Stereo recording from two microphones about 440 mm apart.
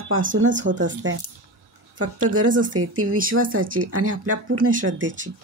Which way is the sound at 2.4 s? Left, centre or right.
Right.